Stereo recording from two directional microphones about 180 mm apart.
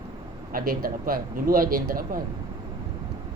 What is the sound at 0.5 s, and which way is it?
Speech, 55° right (ahead or behind).